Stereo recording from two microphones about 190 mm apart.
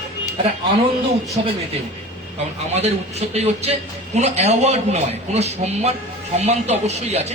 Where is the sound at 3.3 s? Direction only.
35° right (ahead or behind).